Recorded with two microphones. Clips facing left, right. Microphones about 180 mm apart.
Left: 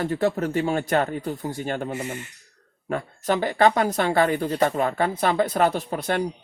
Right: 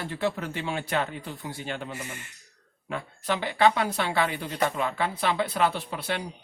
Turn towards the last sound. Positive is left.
turn(degrees=45)  # may be behind; listen again after turning